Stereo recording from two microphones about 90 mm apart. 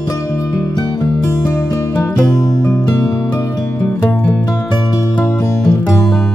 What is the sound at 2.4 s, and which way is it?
Music, 45° left (ahead or behind).